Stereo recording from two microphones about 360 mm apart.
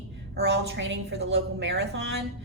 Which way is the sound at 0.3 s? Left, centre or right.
Right.